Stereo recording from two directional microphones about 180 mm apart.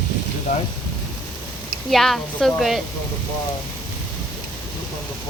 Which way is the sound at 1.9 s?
Centre (ahead or behind).